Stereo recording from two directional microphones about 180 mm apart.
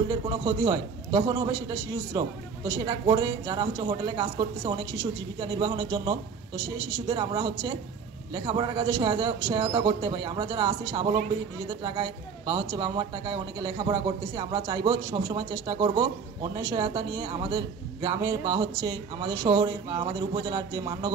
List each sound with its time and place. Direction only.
0.1 s a man's voice: 20° right (ahead or behind)